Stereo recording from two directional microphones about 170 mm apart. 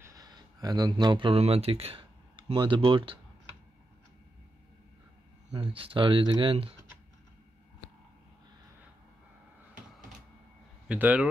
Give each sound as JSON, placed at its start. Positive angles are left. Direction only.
{"t": 0.0, "sound": "speech", "side_deg": -20}
{"t": 5.5, "sound": "speech", "side_deg": -30}
{"t": 10.9, "sound": "speech", "side_deg": -10}